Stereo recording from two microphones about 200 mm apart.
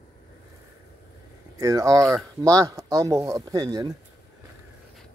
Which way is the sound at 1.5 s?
15° right (ahead or behind).